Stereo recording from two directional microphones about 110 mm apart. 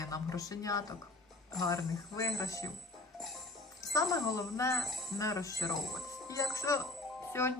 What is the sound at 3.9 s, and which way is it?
Speech, 30° left (ahead or behind).